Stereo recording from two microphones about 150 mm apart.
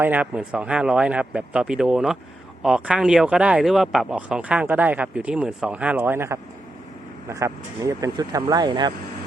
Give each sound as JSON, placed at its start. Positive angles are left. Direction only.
{"t": 0.0, "sound": "speech", "side_deg": -10}